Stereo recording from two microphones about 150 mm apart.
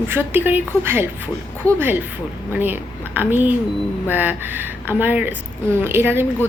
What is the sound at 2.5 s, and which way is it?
A woman's voice, 15° right (ahead or behind).